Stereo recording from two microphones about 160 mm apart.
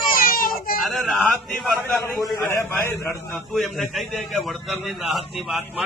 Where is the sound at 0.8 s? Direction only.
Centre (ahead or behind).